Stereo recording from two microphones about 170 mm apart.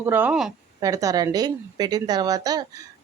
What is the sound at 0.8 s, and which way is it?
A woman's voice, 20° right (ahead or behind).